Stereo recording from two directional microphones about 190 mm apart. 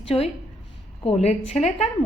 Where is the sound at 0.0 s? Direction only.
30° left (ahead or behind).